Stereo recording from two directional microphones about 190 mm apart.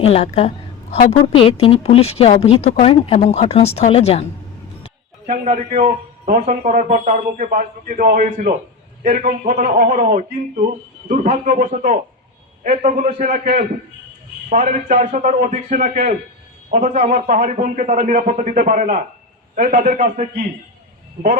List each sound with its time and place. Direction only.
0.0 s a woman's voice: 30° left (ahead or behind)
0.3 s a sound: 30° left (ahead or behind)
1.2 s speech: 30° left (ahead or behind)
5.2 s a man's voice: 40° right (ahead or behind)